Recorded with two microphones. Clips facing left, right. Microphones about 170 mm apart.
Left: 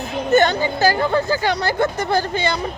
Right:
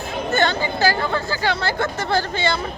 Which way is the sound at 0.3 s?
15° left (ahead or behind).